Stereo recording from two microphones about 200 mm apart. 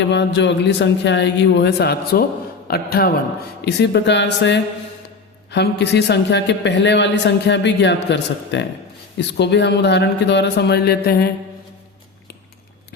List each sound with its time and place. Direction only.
0.1 s a man's voice: 60° left (ahead or behind)
3.7 s a man's voice: 60° left (ahead or behind)